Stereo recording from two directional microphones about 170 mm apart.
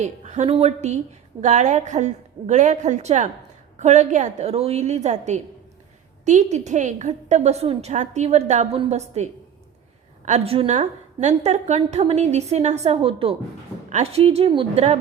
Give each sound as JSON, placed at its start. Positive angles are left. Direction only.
{"t": 0.0, "sound": "a woman's voice", "side_deg": -45}